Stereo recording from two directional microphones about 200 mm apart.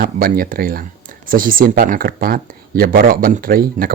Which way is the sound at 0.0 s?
50° right (ahead or behind).